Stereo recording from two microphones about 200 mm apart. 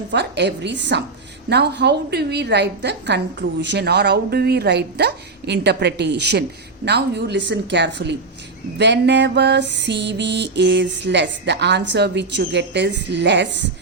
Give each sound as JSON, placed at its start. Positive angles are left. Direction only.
{"t": 0.1, "sound": "music", "side_deg": -60}